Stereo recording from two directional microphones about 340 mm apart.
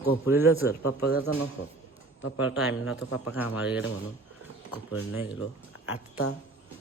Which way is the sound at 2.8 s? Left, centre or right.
Left.